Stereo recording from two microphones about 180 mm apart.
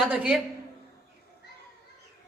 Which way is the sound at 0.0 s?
5° right (ahead or behind).